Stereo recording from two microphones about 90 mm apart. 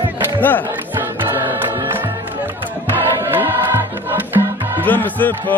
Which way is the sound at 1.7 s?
25° right (ahead or behind).